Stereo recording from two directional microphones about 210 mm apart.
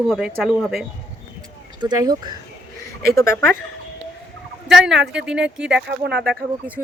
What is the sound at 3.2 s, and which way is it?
Speech, 10° left (ahead or behind).